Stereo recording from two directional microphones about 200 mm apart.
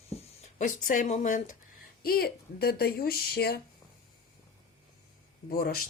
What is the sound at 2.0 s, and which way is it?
Speech, 50° left (ahead or behind).